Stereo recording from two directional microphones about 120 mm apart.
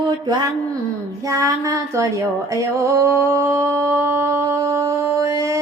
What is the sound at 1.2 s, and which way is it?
Female singing, 30° right (ahead or behind).